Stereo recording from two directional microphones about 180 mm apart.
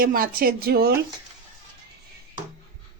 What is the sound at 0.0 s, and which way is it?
Speech, 55° right (ahead or behind).